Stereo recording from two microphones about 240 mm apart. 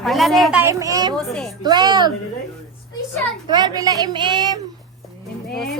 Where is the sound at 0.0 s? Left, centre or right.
Centre.